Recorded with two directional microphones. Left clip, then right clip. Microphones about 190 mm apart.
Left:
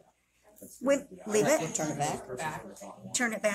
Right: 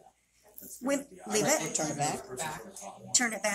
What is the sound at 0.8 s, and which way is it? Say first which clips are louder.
Speech: left 4 dB; 35° left (ahead or behind).